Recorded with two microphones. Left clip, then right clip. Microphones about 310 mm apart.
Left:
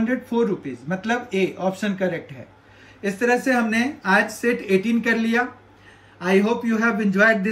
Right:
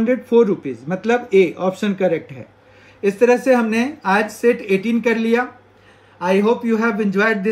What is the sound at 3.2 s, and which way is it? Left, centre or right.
A man's voice, centre.